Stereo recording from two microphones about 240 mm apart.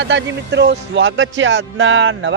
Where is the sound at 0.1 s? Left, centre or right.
Right.